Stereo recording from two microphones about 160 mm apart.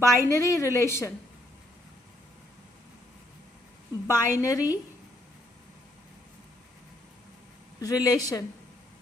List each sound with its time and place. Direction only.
0.0 s a woman's voice: 20° left (ahead or behind)
4.0 s a woman's voice: 20° left (ahead or behind)
7.8 s a woman's voice: 20° left (ahead or behind)